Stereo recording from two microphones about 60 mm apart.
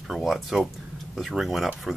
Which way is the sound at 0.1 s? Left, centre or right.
Centre.